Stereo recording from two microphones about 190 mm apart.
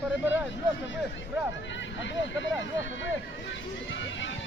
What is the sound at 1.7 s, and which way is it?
Speech, 75° left (ahead or behind).